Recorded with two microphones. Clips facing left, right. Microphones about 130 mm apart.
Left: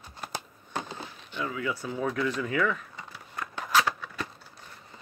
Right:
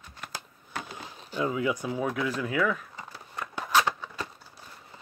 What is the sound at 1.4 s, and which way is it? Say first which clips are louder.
Speech: right 4 dB; 20° right (ahead or behind).